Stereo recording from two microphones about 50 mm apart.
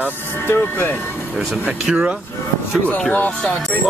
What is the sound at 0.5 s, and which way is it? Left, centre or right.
Speech, left.